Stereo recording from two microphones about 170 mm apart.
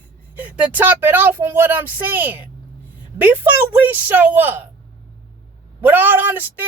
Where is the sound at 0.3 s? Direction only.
10° right (ahead or behind).